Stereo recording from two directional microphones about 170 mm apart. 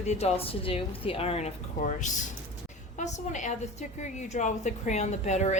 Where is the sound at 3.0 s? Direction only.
45° left (ahead or behind).